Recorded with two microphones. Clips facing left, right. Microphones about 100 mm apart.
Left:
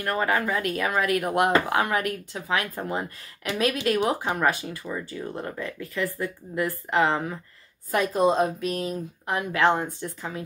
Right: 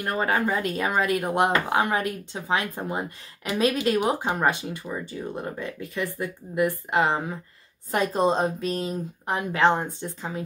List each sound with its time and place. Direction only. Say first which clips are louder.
0.0 s speech: even; 20° right (ahead or behind)
7.9 s speech: left 1 dB; 30° right (ahead or behind)